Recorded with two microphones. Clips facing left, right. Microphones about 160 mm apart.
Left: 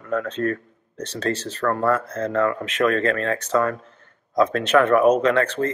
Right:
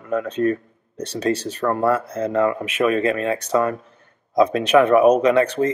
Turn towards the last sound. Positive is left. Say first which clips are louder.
# right 3 dB
turn(degrees=-15)  # may be behind; listen again after turning